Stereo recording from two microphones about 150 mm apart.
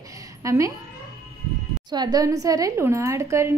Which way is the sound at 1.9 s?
25° right (ahead or behind).